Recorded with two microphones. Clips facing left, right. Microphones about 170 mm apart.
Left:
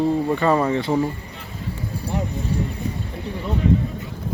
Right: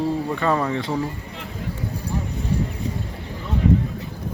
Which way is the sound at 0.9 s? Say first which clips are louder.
Left 6 dB; 20° left (ahead or behind).